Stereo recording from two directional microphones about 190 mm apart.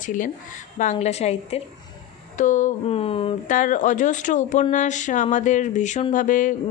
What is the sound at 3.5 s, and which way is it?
A woman's voice, 45° left (ahead or behind).